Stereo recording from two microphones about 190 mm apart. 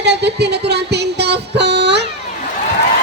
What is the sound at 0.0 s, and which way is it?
Music, 65° right (ahead or behind).